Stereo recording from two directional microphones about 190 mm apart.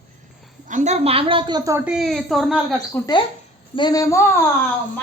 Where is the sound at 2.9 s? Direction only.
10° left (ahead or behind).